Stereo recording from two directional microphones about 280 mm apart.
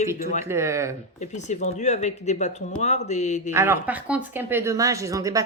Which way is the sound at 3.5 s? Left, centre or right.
Centre.